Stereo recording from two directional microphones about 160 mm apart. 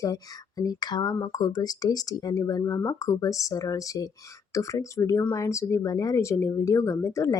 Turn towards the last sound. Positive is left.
turn(degrees=20)  # may be behind; listen again after turning